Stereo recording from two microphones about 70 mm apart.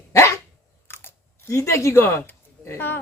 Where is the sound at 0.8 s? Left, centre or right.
Left.